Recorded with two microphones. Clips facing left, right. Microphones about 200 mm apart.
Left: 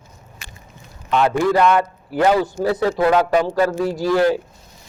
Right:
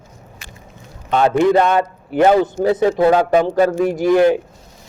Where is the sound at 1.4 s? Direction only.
20° right (ahead or behind).